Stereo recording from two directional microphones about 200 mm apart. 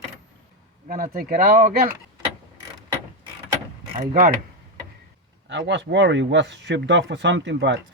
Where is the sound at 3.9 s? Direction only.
45° right (ahead or behind).